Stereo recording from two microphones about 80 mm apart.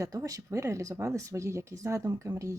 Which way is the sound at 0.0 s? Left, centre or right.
Right.